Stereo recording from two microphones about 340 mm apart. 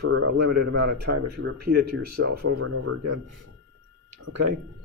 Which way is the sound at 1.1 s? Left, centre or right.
Right.